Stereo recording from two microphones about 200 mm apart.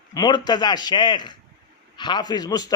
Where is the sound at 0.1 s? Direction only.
20° left (ahead or behind).